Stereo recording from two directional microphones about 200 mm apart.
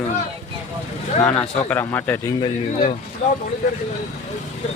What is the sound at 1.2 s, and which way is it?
A man's voice, 5° left (ahead or behind).